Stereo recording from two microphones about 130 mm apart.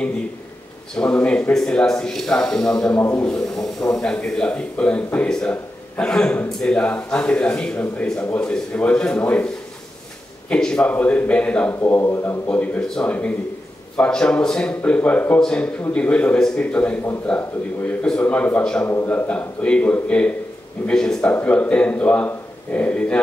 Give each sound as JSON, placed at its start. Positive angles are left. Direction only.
{"t": 0.9, "sound": "speech", "side_deg": 10}
{"t": 3.0, "sound": "a man's voice", "side_deg": 20}
{"t": 3.3, "sound": "speech", "side_deg": 5}
{"t": 10.5, "sound": "speech", "side_deg": 5}